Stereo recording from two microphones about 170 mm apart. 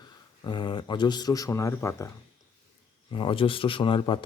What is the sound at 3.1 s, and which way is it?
Speech, 30° left (ahead or behind).